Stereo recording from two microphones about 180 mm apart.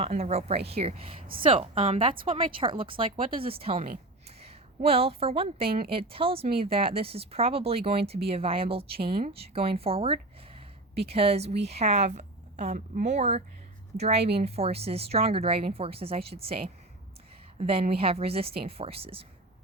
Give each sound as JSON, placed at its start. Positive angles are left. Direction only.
{"t": 0.0, "sound": "a woman's voice", "side_deg": -35}
{"t": 3.8, "sound": "a woman's voice", "side_deg": -50}
{"t": 4.8, "sound": "speech", "side_deg": -35}